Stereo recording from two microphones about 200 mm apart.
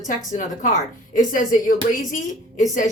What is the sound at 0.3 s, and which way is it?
A woman's voice, 40° left (ahead or behind).